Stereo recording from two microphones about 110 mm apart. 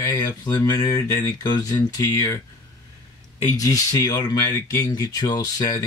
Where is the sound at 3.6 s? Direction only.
35° left (ahead or behind).